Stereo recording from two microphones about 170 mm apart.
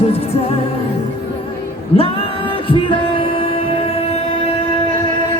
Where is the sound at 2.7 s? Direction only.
30° left (ahead or behind).